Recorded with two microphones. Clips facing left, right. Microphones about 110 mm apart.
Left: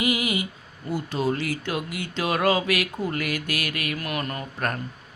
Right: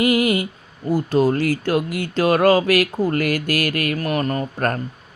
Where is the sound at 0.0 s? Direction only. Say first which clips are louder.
Right 8 dB; 50° right (ahead or behind).